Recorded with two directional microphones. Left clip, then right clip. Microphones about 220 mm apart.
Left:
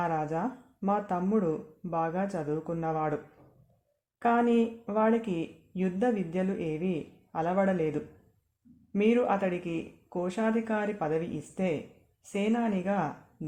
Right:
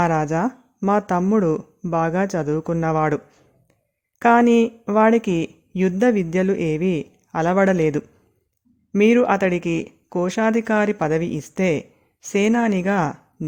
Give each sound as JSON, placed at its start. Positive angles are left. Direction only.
{"t": 0.0, "sound": "speech", "side_deg": -50}
{"t": 4.2, "sound": "speech", "side_deg": -50}